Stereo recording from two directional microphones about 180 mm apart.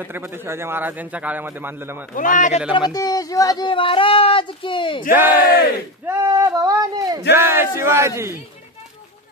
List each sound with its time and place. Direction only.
0.0 s a man's voice: 10° right (ahead or behind)
2.1 s speech: 45° left (ahead or behind)
2.9 s speech: 20° left (ahead or behind)
5.1 s a man's voice: 10° right (ahead or behind)